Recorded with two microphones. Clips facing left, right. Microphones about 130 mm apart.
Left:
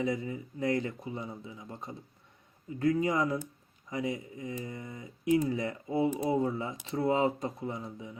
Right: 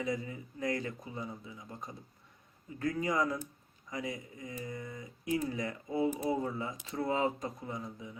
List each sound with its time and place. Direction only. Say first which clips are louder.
0.0 s speech: left 4 dB; 25° left (ahead or behind)